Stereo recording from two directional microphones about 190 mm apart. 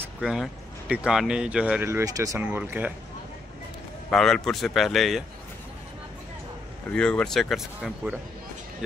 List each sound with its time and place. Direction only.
0.2 s speech: centre (ahead or behind)
4.1 s speech: centre (ahead or behind)
6.9 s speech: 5° left (ahead or behind)